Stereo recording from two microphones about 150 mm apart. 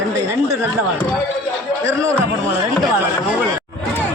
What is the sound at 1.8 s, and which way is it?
Chatter, 20° right (ahead or behind).